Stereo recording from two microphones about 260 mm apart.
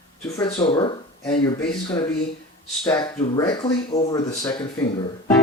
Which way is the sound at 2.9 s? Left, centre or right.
Centre.